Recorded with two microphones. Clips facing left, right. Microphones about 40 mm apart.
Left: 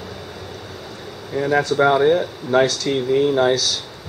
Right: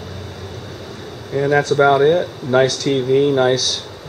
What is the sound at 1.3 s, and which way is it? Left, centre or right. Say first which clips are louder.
Speech: right 3 dB; centre.